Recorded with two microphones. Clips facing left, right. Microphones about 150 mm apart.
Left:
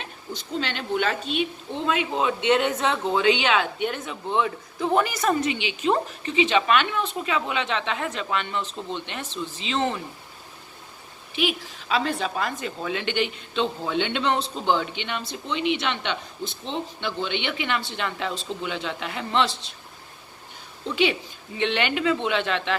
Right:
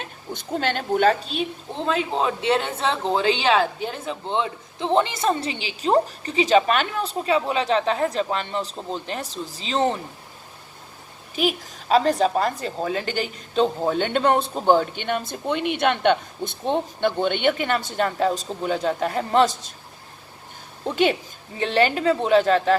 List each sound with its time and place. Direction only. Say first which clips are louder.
0.0 s speech: right 2 dB; 50° right (ahead or behind)
11.3 s a woman's voice: right 3 dB; 40° right (ahead or behind)
20.8 s a woman's voice: right 3 dB; 45° right (ahead or behind)